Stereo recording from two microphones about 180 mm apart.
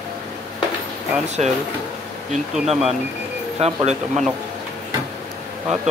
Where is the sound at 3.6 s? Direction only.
40° right (ahead or behind).